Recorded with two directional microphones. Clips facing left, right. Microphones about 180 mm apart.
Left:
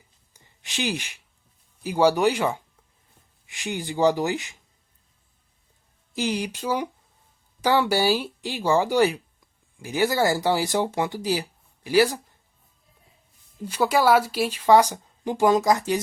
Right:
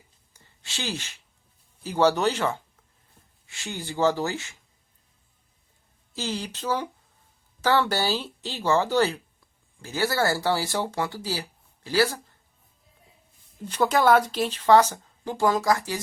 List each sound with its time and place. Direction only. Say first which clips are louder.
0.3 s a sound: left 6 dB; 15° left (ahead or behind)
1.8 s speech: left 2 dB; 10° left (ahead or behind)
6.1 s speech: left 5 dB; 15° left (ahead or behind)
13.7 s speech: even; 10° left (ahead or behind)